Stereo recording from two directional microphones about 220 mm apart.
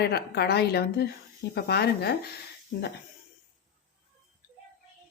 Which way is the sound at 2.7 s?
55° left (ahead or behind).